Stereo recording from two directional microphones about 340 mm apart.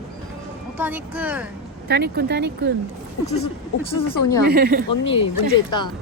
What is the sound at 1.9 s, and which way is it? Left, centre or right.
Speech, right.